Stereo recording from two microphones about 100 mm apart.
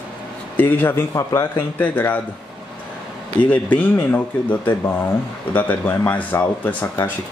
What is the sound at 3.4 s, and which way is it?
Speech, 15° left (ahead or behind).